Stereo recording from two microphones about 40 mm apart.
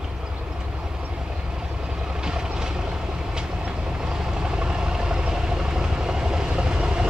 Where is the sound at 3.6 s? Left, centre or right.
Right.